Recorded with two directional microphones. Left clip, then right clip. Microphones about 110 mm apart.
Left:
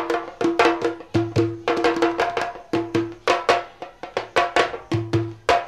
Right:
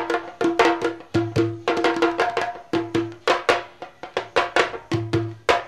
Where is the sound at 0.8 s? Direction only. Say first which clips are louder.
Left 1 dB; 30° right (ahead or behind).